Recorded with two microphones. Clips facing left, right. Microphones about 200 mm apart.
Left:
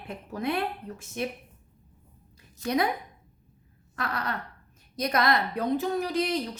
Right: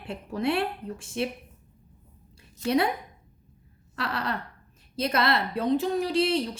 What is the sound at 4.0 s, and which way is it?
Speech, 30° right (ahead or behind).